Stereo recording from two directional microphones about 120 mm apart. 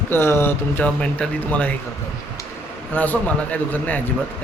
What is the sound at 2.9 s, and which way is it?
Mantra, 15° left (ahead or behind).